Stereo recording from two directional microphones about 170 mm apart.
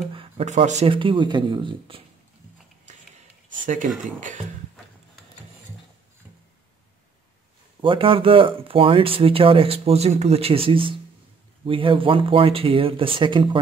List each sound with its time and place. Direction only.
0.1 s speech: 30° right (ahead or behind)
2.9 s a sound: 45° right (ahead or behind)
3.5 s speech: 50° right (ahead or behind)
7.8 s speech: 30° right (ahead or behind)